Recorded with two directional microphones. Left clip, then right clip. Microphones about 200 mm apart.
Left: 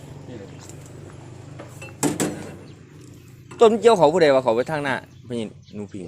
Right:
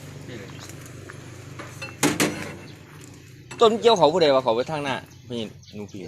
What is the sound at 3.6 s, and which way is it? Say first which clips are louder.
A man's voice: left 2 dB; 35° left (ahead or behind).